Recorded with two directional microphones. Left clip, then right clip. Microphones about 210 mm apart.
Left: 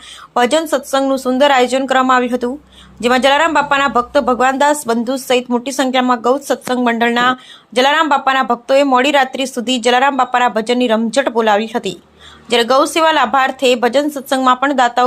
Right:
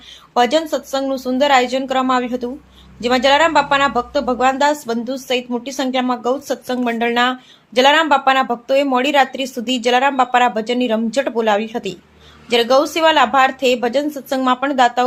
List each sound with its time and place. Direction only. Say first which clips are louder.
0.3 s a woman's voice: left 2 dB; 15° left (ahead or behind)